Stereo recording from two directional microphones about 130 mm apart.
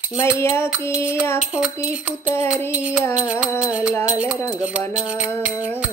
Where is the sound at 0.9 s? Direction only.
10° right (ahead or behind).